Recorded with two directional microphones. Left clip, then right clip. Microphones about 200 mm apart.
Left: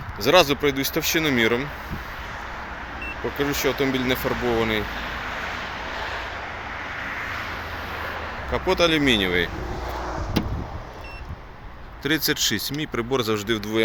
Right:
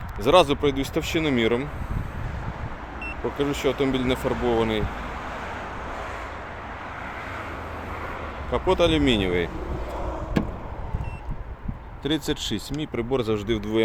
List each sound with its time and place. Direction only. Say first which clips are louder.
0.2 s speech: left 1 dB; centre (ahead or behind)
3.3 s speech: left 1 dB; 5° right (ahead or behind)
6.0 s vehicle: left 4 dB; 60° right (ahead or behind)
7.3 s vehicle: left 3 dB; 50° right (ahead or behind)
8.5 s speech: left 1 dB; 10° right (ahead or behind)
12.0 s speech: left 4 dB; centre (ahead or behind)